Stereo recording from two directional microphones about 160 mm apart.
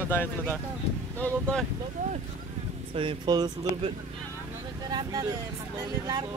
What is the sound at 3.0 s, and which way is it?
Speech, 30° right (ahead or behind).